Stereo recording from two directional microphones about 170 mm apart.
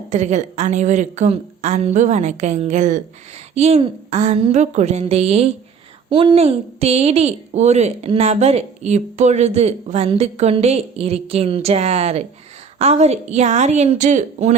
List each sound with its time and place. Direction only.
0.1 s a woman's voice: 45° right (ahead or behind)